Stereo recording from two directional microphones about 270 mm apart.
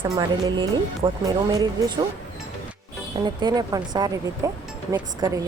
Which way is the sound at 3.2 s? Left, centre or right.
Centre.